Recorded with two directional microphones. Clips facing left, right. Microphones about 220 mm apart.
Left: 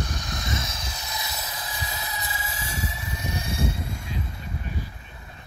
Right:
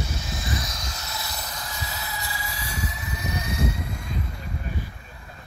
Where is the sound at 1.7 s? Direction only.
15° left (ahead or behind).